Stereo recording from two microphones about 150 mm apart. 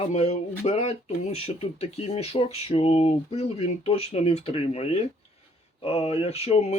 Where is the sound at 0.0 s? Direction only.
45° left (ahead or behind).